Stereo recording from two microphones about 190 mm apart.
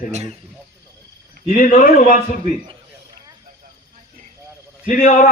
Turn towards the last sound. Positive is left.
turn(degrees=45)  # may be behind; listen again after turning